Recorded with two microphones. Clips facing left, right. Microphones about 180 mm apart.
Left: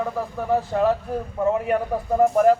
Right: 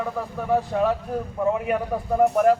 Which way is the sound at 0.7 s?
Centre (ahead or behind).